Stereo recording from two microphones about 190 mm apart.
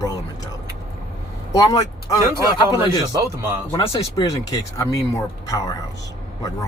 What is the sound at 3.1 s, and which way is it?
Speech, 15° right (ahead or behind).